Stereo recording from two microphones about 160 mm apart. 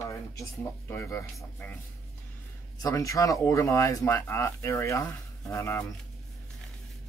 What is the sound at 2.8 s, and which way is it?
Speech, 20° left (ahead or behind).